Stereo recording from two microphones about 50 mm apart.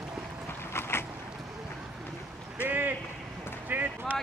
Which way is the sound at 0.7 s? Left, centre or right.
Left.